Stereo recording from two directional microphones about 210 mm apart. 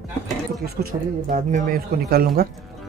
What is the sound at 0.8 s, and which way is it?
Speech, 45° right (ahead or behind).